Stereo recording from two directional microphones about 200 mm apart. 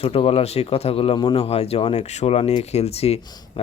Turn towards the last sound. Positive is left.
turn(degrees=30)  # may be behind; listen again after turning